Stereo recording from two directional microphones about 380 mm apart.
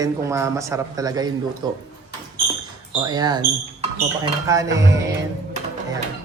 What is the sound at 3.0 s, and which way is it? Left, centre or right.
Speech, centre.